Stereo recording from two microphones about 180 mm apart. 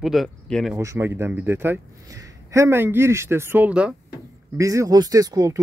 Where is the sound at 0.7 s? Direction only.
15° right (ahead or behind).